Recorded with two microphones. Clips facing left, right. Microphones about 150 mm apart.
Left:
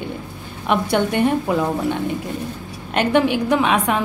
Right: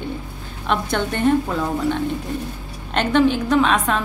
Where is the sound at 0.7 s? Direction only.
15° left (ahead or behind).